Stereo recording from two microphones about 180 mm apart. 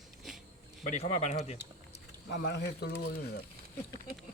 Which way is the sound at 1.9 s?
75° left (ahead or behind).